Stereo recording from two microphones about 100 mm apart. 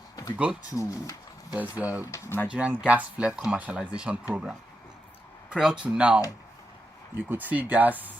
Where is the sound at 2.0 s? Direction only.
25° left (ahead or behind).